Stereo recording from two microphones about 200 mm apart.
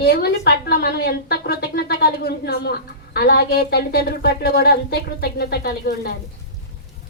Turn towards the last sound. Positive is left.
turn(degrees=50)  # may be behind; listen again after turning